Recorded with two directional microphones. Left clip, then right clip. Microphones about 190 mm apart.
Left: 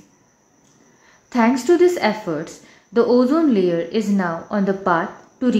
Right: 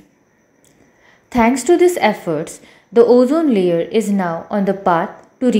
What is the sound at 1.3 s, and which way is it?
A woman's voice, 10° right (ahead or behind).